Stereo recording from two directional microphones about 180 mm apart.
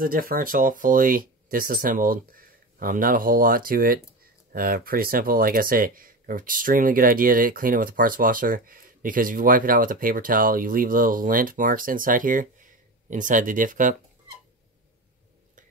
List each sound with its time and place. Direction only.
0.0 s speech: 55° right (ahead or behind)